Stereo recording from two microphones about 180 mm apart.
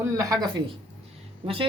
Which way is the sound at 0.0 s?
20° right (ahead or behind).